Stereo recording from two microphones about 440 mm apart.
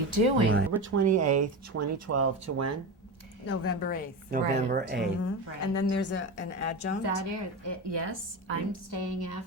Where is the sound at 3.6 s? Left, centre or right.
Left.